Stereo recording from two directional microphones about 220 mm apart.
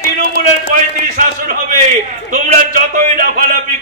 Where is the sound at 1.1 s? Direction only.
40° right (ahead or behind).